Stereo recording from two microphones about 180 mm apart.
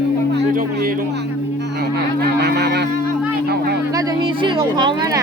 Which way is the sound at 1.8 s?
65° right (ahead or behind).